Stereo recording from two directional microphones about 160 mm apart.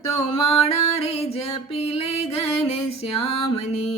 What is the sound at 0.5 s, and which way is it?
Music, 40° left (ahead or behind).